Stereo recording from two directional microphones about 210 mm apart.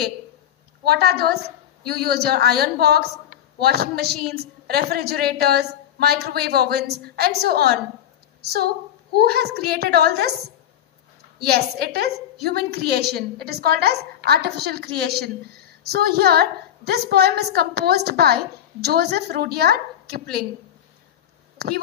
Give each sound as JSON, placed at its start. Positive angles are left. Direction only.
{"t": 0.8, "sound": "a woman's voice", "side_deg": -50}
{"t": 11.4, "sound": "a woman's voice", "side_deg": -50}